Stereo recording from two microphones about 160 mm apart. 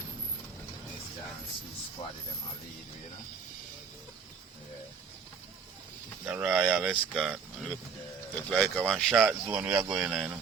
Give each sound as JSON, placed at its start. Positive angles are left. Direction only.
{"t": 2.0, "sound": "speech", "side_deg": 35}
{"t": 6.2, "sound": "speech", "side_deg": -10}